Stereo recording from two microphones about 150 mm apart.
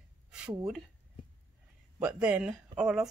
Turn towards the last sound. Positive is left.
turn(degrees=-5)  # may be behind; listen again after turning